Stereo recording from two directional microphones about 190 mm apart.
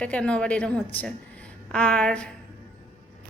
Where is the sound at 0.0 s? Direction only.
5° left (ahead or behind).